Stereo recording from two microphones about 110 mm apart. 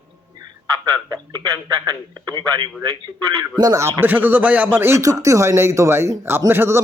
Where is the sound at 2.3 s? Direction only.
45° right (ahead or behind).